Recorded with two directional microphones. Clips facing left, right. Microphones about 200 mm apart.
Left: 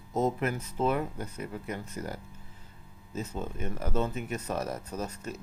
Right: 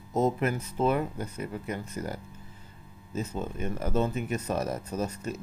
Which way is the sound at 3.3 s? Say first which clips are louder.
Right 3 dB; 15° right (ahead or behind).